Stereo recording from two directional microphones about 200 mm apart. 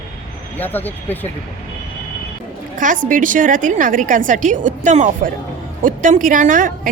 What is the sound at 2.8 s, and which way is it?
A woman's voice, 40° right (ahead or behind).